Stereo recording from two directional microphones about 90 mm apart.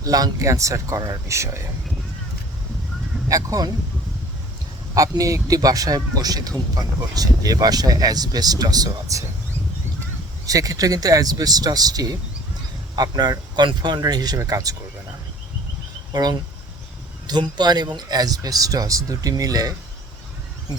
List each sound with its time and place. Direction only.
0.0 s speech: 40° right (ahead or behind)
3.2 s speech: 40° right (ahead or behind)
4.9 s speech: 40° right (ahead or behind)
10.4 s speech: 40° right (ahead or behind)
16.1 s speech: 50° right (ahead or behind)